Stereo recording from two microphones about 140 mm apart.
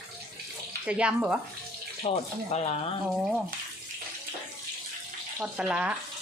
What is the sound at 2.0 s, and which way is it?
Speech, 45° left (ahead or behind).